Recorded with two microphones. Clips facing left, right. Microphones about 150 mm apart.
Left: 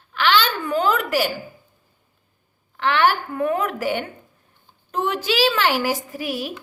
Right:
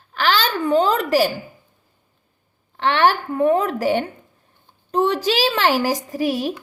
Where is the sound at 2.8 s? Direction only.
35° right (ahead or behind).